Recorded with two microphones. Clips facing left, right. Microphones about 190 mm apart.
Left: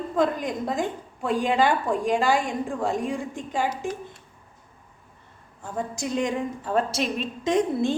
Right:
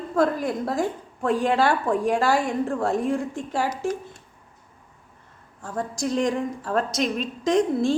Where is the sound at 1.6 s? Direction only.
15° left (ahead or behind).